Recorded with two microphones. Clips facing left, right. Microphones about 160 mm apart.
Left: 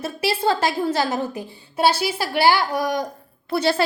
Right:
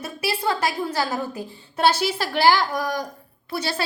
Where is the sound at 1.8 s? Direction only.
10° left (ahead or behind).